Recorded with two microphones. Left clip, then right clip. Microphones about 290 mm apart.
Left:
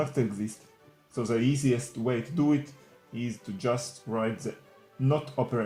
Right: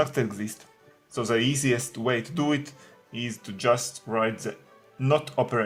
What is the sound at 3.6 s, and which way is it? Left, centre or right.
Speech, right.